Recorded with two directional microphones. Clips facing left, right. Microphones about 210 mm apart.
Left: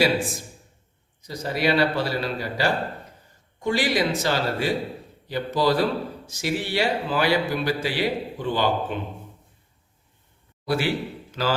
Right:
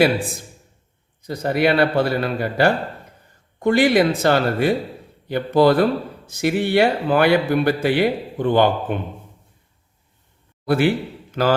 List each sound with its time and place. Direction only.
1.2 s speech: 55° right (ahead or behind)
10.7 s a man's voice: 55° right (ahead or behind)